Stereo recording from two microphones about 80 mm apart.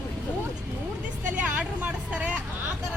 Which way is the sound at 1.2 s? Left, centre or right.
Centre.